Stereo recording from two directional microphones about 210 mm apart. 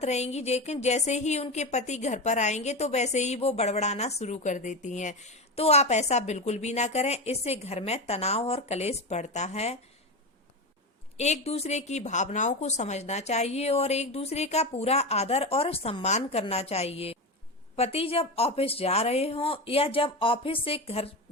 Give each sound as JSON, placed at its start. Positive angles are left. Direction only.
{"t": 0.0, "sound": "a woman's voice", "side_deg": 30}
{"t": 11.2, "sound": "a woman's voice", "side_deg": 30}